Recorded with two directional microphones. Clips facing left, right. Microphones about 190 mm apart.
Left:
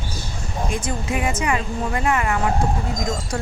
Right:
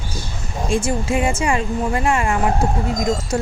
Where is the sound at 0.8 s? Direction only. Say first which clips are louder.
Right 4 dB; 25° right (ahead or behind).